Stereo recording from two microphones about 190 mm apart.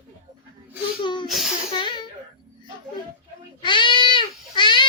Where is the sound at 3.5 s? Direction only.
25° left (ahead or behind).